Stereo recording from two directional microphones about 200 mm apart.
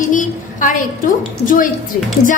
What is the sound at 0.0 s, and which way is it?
A woman's voice, 40° left (ahead or behind).